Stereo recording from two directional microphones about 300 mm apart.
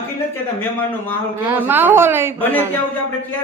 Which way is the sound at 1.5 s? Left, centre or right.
Centre.